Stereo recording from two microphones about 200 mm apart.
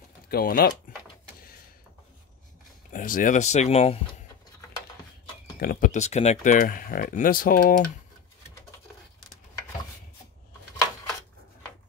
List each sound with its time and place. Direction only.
0.3 s speech: 50° left (ahead or behind)
2.9 s speech: 40° left (ahead or behind)
5.6 s speech: 45° left (ahead or behind)